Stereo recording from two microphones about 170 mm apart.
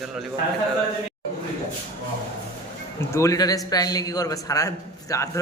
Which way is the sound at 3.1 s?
20° left (ahead or behind).